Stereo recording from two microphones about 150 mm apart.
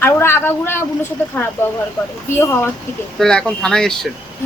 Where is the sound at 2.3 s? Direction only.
15° left (ahead or behind).